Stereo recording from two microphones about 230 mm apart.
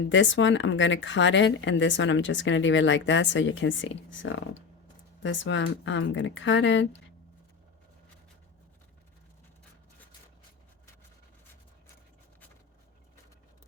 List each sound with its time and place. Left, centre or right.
0.0 s speech: left